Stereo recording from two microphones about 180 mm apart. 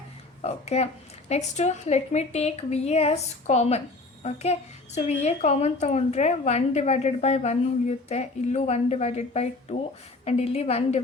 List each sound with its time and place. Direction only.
0.4 s a woman's voice: 35° left (ahead or behind)